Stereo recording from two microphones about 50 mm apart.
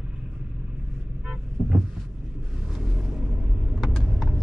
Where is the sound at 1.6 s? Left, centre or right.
Centre.